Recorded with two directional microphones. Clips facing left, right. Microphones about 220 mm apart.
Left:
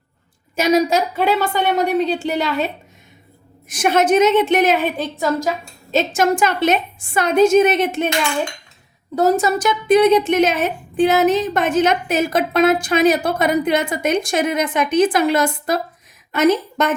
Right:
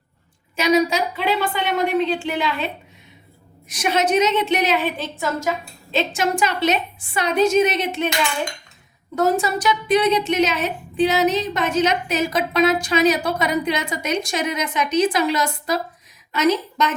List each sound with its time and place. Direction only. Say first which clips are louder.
0.5 s a woman's voice: left 2 dB; 45° left (ahead or behind)
3.7 s a woman's voice: left 4 dB; 50° left (ahead or behind)
9.1 s a woman's voice: left 3 dB; 40° left (ahead or behind)